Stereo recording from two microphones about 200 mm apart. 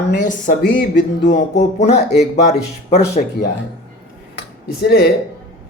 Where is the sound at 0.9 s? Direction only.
65° left (ahead or behind).